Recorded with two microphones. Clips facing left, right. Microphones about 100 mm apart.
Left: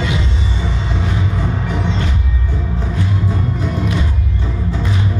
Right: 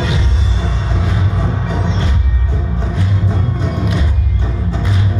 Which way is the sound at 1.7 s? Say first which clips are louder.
Right 1 dB; 25° right (ahead or behind).